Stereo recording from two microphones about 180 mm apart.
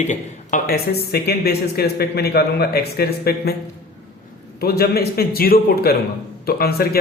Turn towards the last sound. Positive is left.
turn(degrees=60)  # may be behind; listen again after turning